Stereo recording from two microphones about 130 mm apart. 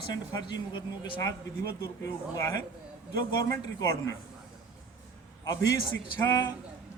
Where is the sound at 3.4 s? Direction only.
25° left (ahead or behind).